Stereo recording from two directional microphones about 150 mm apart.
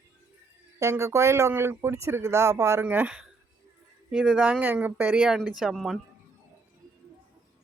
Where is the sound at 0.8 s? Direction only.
20° right (ahead or behind); by 6.0 s centre (ahead or behind).